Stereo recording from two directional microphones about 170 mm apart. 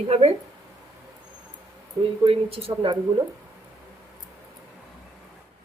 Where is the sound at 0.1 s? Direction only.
35° right (ahead or behind).